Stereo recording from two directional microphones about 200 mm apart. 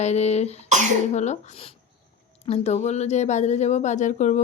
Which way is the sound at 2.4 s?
30° left (ahead or behind).